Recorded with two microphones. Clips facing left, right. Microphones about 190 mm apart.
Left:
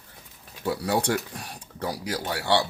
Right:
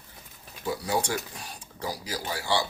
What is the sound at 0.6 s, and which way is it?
Speech, 60° left (ahead or behind).